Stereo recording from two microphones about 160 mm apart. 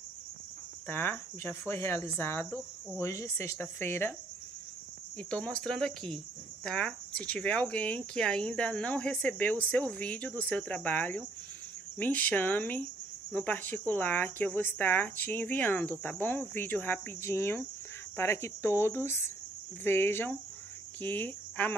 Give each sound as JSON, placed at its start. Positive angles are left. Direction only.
{"t": 0.8, "sound": "speech", "side_deg": 10}
{"t": 5.1, "sound": "speech", "side_deg": 5}